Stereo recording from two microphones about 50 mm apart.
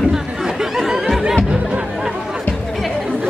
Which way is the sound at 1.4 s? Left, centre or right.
Right.